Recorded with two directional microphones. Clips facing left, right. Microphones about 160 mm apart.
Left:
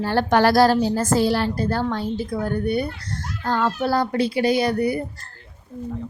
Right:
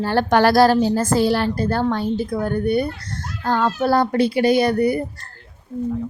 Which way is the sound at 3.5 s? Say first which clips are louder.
Right 3 dB; 65° right (ahead or behind).